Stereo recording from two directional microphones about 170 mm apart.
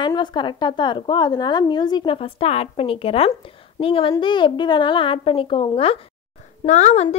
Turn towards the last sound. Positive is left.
turn(degrees=40)  # may be behind; listen again after turning